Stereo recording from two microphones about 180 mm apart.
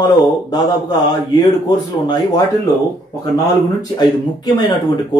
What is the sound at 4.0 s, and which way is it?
Speech, 25° left (ahead or behind).